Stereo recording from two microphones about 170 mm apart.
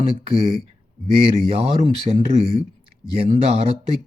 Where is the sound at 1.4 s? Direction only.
35° right (ahead or behind).